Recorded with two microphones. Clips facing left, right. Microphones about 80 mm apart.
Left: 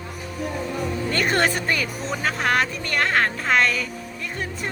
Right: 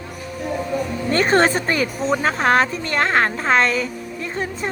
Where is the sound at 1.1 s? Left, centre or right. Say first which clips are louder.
Right 6 dB; right.